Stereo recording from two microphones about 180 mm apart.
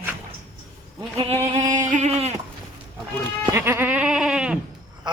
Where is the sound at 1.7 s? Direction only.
40° right (ahead or behind).